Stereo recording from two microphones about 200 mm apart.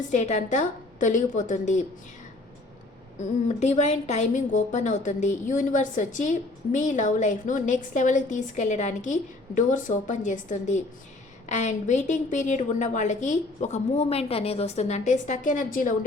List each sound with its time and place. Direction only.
0.1 s a woman's voice: 35° left (ahead or behind)
3.6 s a woman's voice: 35° left (ahead or behind)